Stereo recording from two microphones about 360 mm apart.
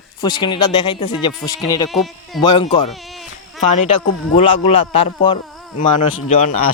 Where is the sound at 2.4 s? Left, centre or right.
Centre.